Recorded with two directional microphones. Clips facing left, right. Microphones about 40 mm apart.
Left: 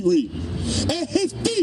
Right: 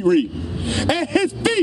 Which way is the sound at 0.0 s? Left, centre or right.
Right.